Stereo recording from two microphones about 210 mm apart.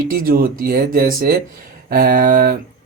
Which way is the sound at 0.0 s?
45° right (ahead or behind).